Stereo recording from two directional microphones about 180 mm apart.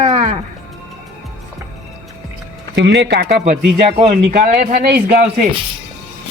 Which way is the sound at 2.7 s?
70° right (ahead or behind).